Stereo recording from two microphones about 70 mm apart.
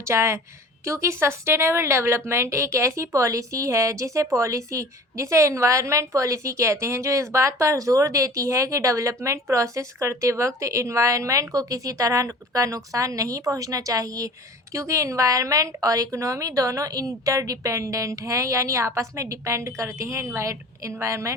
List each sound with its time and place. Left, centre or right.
0.0 s a woman's voice: right